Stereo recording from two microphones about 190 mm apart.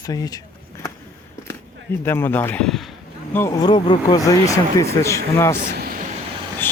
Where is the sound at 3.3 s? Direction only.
15° left (ahead or behind).